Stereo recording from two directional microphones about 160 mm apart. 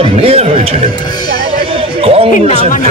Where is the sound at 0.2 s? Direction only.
40° right (ahead or behind).